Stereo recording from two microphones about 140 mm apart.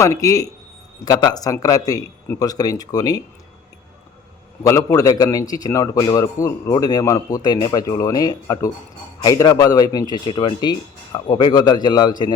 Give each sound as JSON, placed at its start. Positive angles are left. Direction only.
{"t": 0.0, "sound": "a man's voice", "side_deg": 25}
{"t": 4.6, "sound": "a man's voice", "side_deg": 25}